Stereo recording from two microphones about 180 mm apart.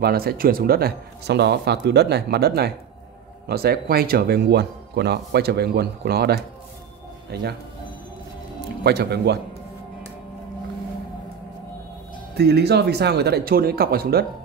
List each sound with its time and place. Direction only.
0.0 s speech: 60° right (ahead or behind)
8.8 s speech: 65° right (ahead or behind)
12.4 s speech: 65° right (ahead or behind)